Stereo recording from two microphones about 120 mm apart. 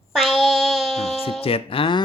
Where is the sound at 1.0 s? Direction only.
55° left (ahead or behind).